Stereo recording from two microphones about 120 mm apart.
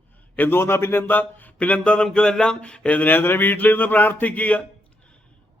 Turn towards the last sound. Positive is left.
turn(degrees=10)  # may be behind; listen again after turning